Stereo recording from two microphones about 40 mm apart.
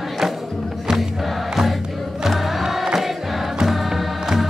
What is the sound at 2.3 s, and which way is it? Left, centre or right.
Music, centre.